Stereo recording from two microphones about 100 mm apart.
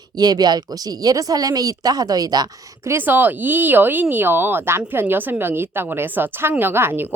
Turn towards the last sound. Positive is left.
turn(degrees=-20)  # may be behind; listen again after turning